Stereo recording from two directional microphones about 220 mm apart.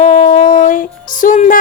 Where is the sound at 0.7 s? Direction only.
35° left (ahead or behind).